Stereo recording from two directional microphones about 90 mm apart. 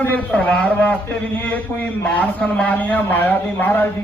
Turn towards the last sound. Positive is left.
turn(degrees=20)  # may be behind; listen again after turning